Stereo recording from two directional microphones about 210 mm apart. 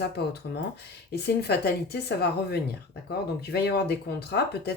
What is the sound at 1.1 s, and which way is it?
Speech, 50° left (ahead or behind).